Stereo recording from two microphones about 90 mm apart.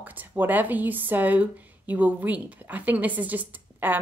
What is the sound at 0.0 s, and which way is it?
Speech, 20° right (ahead or behind).